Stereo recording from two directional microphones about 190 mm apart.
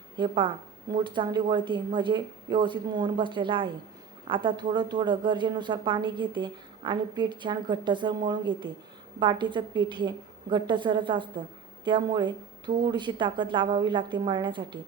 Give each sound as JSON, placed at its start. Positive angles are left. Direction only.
{"t": 0.2, "sound": "speech", "side_deg": -25}